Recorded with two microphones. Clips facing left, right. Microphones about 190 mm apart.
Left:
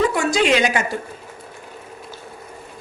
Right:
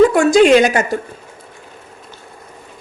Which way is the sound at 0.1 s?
50° right (ahead or behind).